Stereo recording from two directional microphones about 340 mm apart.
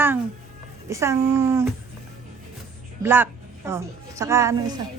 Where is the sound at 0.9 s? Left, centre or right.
Centre.